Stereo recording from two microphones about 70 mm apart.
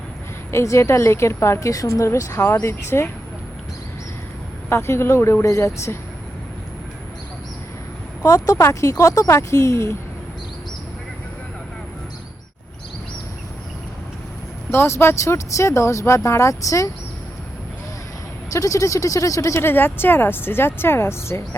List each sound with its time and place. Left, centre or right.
0.5 s speech: left
2.0 s speech: left
4.7 s speech: left
8.2 s speech: left
14.7 s speech: left
18.5 s speech: left
19.5 s speech: left